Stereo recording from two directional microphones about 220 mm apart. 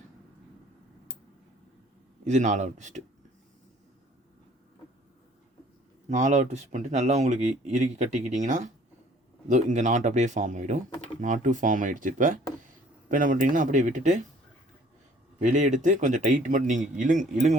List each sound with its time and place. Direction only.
2.2 s speech: 35° right (ahead or behind)
6.1 s speech: 35° right (ahead or behind)
15.4 s speech: 35° right (ahead or behind)